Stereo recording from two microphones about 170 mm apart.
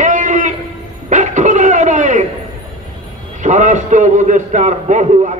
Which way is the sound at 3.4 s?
50° right (ahead or behind).